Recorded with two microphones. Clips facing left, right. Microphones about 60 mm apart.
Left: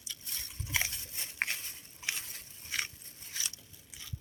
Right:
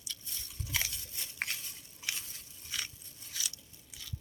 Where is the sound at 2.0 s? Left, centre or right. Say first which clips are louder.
Left 2 dB; left.